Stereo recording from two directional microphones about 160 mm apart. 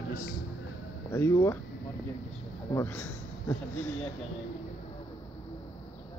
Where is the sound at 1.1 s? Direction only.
15° left (ahead or behind).